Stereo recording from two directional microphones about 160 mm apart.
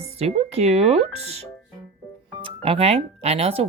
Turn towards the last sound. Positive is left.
turn(degrees=-40)  # may be behind; listen again after turning